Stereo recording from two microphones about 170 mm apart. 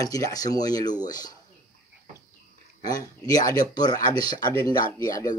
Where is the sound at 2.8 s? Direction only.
20° left (ahead or behind).